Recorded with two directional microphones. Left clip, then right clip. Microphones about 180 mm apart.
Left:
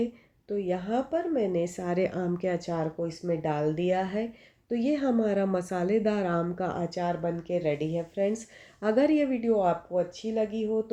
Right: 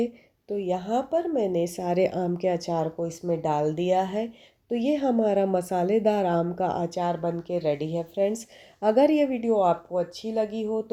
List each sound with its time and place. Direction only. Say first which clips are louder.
0.5 s speech: right 3 dB; 35° right (ahead or behind)